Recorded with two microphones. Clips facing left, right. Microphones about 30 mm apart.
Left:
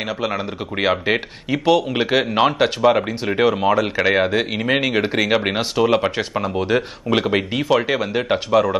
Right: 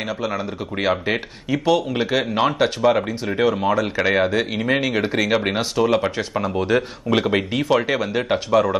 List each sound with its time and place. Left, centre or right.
0.3 s speech: left
3.9 s speech: centre